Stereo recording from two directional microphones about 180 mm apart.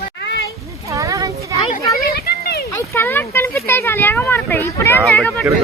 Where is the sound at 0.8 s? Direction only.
20° right (ahead or behind).